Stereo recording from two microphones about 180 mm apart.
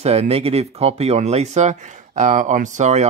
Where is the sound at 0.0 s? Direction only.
35° right (ahead or behind).